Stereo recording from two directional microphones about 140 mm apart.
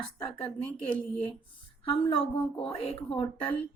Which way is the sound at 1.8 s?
40° left (ahead or behind).